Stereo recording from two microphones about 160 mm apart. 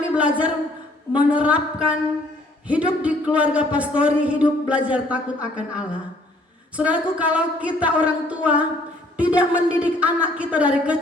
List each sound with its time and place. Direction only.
0.1 s a man's voice: 10° right (ahead or behind)